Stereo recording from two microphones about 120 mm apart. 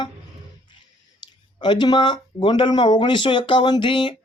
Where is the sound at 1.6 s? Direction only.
40° left (ahead or behind).